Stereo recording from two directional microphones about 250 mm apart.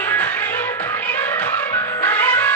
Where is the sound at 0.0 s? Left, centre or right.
Centre.